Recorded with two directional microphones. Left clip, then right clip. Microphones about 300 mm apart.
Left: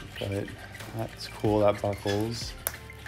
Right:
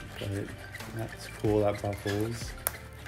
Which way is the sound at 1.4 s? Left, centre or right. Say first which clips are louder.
Left 4 dB; left.